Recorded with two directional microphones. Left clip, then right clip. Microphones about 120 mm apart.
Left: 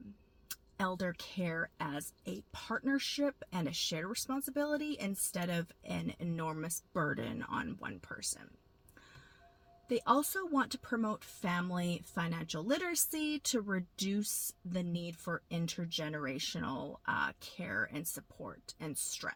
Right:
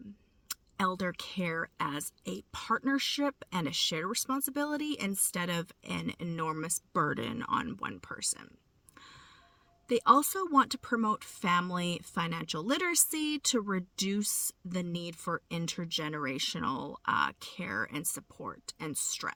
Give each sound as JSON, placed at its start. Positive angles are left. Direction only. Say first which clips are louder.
{"t": 0.8, "sound": "speech", "louder": "right 5 dB", "side_deg": -35}
{"t": 9.9, "sound": "speech", "louder": "right 7 dB", "side_deg": -40}